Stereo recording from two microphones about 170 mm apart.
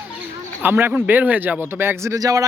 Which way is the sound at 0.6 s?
10° right (ahead or behind).